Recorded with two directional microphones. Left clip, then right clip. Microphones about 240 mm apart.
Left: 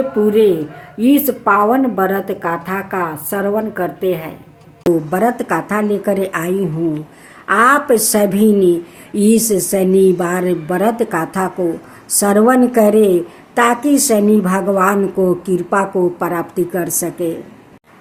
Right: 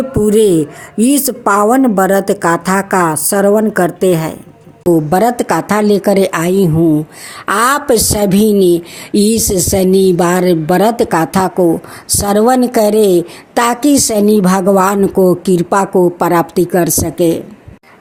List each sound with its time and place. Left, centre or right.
0.3 s a woman's voice: right